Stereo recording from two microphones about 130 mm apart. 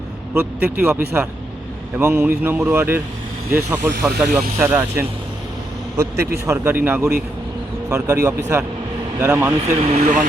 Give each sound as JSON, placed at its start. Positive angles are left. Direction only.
{"t": 0.3, "sound": "a man's voice", "side_deg": -15}
{"t": 9.5, "sound": "speech", "side_deg": -50}